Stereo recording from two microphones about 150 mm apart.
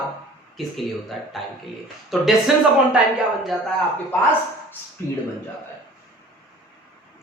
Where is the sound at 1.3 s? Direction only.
Centre (ahead or behind).